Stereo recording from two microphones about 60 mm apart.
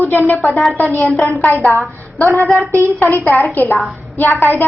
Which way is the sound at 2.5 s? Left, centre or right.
Right.